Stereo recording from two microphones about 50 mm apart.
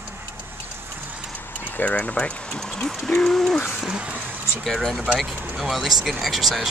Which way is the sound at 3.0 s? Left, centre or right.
Centre.